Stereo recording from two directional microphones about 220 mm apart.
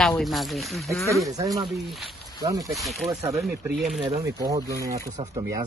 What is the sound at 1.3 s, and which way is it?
Speech, 15° right (ahead or behind).